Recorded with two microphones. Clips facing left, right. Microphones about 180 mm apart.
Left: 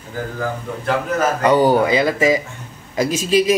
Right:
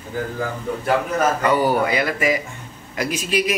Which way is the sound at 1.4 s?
20° left (ahead or behind).